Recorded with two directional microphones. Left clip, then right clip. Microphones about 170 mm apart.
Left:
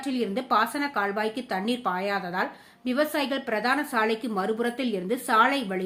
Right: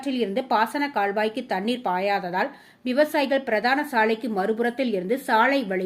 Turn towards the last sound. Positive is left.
turn(degrees=-20)  # may be behind; listen again after turning